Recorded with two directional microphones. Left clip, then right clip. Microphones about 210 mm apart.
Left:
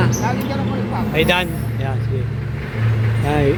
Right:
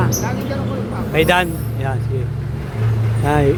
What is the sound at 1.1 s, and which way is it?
Speech, 10° right (ahead or behind).